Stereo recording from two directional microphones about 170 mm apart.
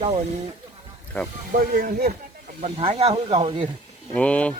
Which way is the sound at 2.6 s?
35° right (ahead or behind).